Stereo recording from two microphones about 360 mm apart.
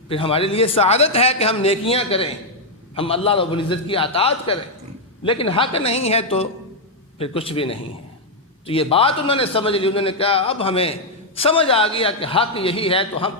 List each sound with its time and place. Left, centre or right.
0.1 s a man's voice: centre